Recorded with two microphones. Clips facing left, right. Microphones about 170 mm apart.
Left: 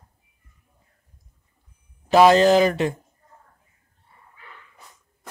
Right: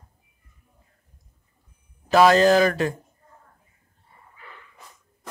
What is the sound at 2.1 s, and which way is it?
Speech, 25° left (ahead or behind).